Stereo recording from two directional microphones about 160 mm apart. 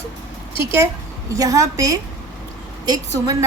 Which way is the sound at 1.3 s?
20° right (ahead or behind).